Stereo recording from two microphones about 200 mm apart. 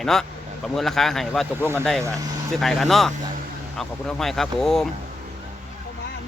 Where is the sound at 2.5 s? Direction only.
Centre (ahead or behind).